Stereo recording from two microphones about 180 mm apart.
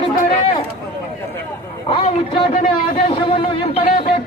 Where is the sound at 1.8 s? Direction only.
35° left (ahead or behind).